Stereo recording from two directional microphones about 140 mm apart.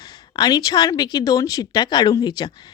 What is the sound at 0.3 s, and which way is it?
Speech, 30° left (ahead or behind).